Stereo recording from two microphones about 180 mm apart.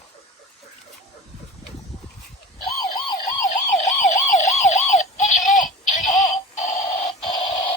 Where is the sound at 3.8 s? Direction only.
40° left (ahead or behind).